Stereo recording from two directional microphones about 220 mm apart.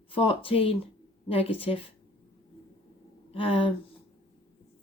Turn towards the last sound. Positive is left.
turn(degrees=25)  # may be behind; listen again after turning